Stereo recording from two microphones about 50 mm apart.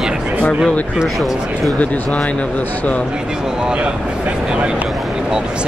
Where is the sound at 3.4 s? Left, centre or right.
Centre.